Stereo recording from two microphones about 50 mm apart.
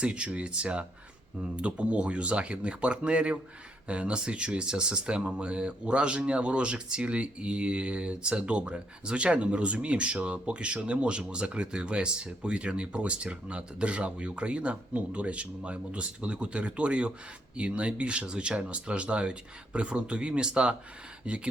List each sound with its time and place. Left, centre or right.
0.0 s speech: right